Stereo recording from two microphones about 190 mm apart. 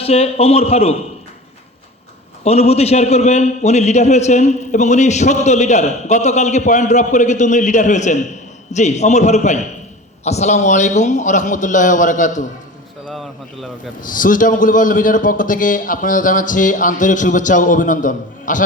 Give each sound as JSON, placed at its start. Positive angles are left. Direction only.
{"t": 0.0, "sound": "a man's voice", "side_deg": 30}
{"t": 2.4, "sound": "a man's voice", "side_deg": 35}
{"t": 13.1, "sound": "speech", "side_deg": 0}
{"t": 14.1, "sound": "a man's voice", "side_deg": 45}